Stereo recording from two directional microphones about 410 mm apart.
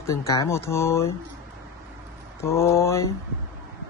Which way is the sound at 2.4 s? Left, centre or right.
Centre.